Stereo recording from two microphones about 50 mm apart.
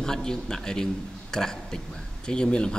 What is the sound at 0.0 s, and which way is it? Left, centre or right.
Speech, centre.